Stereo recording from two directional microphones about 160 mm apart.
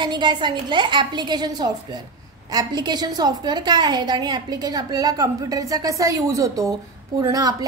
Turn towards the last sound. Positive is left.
turn(degrees=-20)  # may be behind; listen again after turning